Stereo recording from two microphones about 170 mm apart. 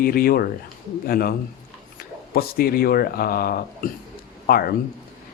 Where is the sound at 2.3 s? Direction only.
60° left (ahead or behind).